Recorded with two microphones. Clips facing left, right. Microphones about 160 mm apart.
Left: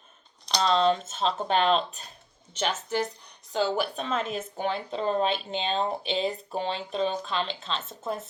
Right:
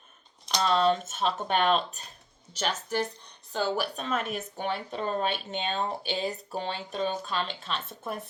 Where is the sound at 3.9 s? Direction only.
30° left (ahead or behind).